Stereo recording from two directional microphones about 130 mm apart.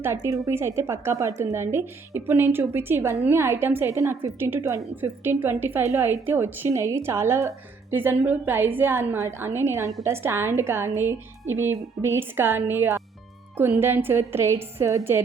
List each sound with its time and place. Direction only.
0.0 s a woman's voice: 20° right (ahead or behind)